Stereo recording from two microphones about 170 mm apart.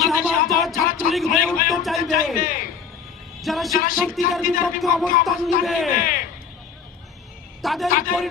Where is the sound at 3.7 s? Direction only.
55° left (ahead or behind).